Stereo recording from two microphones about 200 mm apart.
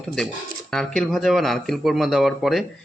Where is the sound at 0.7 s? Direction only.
Centre (ahead or behind).